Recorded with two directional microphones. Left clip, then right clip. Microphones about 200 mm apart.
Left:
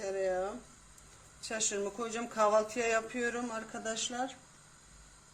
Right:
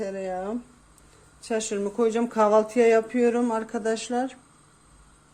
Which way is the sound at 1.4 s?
45° right (ahead or behind).